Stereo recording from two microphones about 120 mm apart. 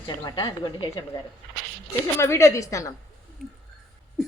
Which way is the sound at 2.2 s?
25° left (ahead or behind).